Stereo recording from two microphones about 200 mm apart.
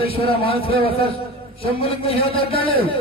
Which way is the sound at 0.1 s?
30° left (ahead or behind).